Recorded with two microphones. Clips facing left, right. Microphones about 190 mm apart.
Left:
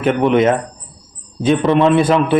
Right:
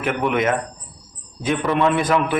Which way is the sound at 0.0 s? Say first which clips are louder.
Left 7 dB; 30° left (ahead or behind).